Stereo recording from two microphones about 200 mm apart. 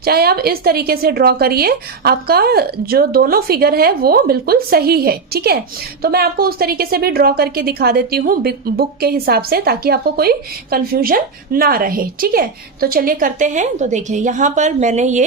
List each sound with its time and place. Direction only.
0.0 s a woman's voice: 50° right (ahead or behind)